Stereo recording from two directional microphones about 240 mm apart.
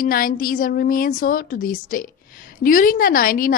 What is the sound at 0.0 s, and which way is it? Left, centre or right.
A woman's voice, left.